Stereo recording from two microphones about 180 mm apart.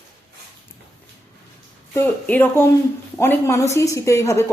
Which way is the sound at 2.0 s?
10° left (ahead or behind).